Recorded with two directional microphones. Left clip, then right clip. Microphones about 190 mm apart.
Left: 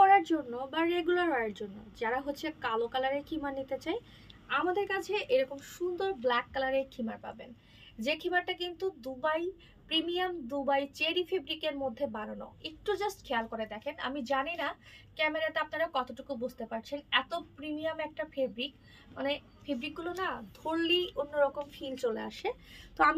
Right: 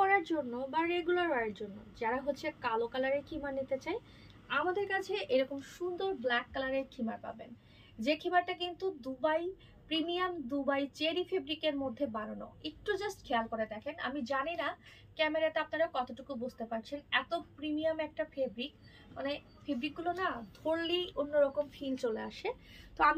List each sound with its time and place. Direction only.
0.0 s a woman's voice: 20° left (ahead or behind)
8.0 s a woman's voice: 20° left (ahead or behind)